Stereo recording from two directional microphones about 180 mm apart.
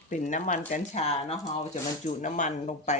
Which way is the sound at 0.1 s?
45° left (ahead or behind).